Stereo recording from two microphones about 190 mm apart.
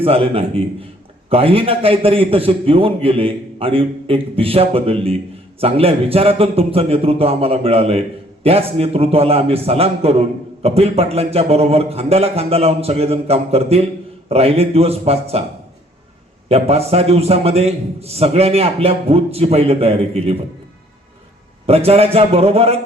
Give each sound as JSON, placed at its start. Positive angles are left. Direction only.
{"t": 0.0, "sound": "a man's voice", "side_deg": -30}
{"t": 16.5, "sound": "a man's voice", "side_deg": -35}
{"t": 21.7, "sound": "a man's voice", "side_deg": -30}